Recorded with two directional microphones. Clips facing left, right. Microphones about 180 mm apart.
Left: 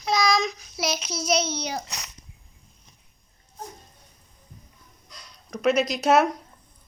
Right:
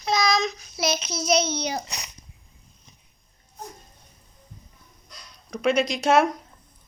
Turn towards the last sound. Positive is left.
turn(degrees=5)  # may be behind; listen again after turning